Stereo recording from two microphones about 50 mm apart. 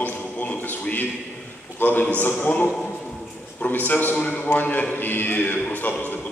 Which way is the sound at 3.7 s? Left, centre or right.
Left.